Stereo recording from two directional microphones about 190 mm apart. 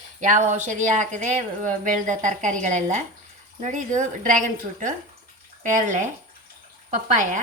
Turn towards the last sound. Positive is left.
turn(degrees=-40)  # may be behind; listen again after turning